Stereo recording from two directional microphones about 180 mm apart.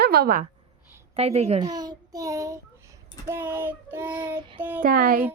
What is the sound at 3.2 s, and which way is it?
Child singing, 15° right (ahead or behind).